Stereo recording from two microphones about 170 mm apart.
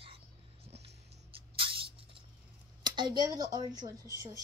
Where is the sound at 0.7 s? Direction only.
35° right (ahead or behind).